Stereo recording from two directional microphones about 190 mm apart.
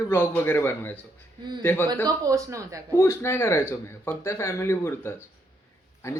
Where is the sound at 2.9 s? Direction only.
15° left (ahead or behind).